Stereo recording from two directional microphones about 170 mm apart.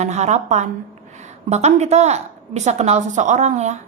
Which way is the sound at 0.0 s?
40° right (ahead or behind).